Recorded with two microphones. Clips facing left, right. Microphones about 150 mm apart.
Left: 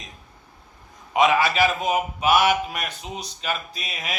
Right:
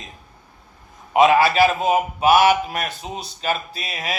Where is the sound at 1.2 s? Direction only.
35° right (ahead or behind).